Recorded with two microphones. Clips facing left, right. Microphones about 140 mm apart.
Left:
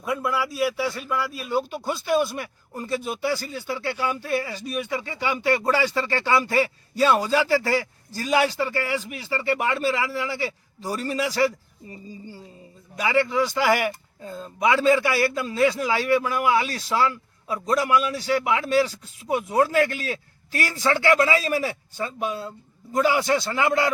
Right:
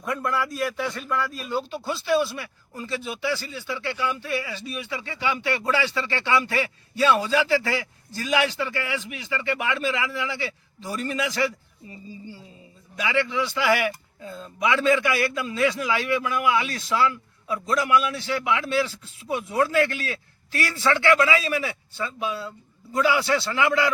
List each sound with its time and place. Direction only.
0.0 s a man's voice: 5° left (ahead or behind)
2.3 s a man's voice: 45° left (ahead or behind)
13.0 s a man's voice: 40° left (ahead or behind)